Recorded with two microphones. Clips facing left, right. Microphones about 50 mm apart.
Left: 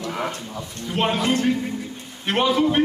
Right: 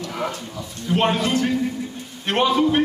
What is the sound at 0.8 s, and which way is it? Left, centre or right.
Speech, centre.